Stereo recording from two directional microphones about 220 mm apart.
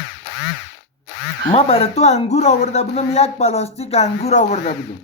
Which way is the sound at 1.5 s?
25° left (ahead or behind).